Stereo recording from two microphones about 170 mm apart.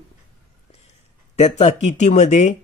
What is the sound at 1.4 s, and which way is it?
Speech, 45° left (ahead or behind).